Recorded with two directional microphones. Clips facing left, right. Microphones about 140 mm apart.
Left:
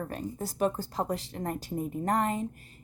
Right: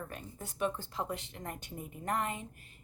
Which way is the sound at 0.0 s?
35° left (ahead or behind).